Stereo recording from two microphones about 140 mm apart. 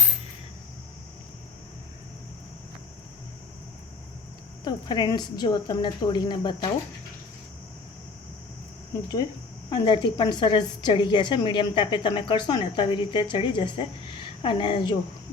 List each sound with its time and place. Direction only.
4.6 s a woman's voice: 30° left (ahead or behind)
8.9 s a woman's voice: 25° left (ahead or behind)